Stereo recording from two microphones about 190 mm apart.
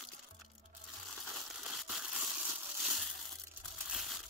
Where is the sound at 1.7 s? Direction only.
Centre (ahead or behind).